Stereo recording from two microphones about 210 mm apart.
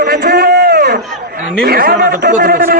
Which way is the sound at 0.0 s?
45° right (ahead or behind).